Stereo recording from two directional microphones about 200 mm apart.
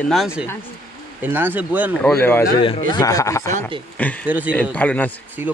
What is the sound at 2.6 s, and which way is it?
Speech, 25° left (ahead or behind).